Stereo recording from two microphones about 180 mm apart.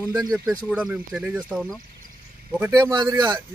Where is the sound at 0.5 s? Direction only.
10° left (ahead or behind).